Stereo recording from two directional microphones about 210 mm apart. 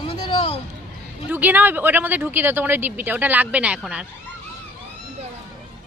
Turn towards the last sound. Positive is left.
turn(degrees=-5)  # may be behind; listen again after turning